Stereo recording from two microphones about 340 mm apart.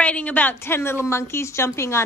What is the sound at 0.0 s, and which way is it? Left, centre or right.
A woman's voice, centre.